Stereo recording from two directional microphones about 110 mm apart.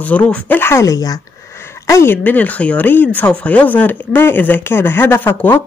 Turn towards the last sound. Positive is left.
turn(degrees=20)  # may be behind; listen again after turning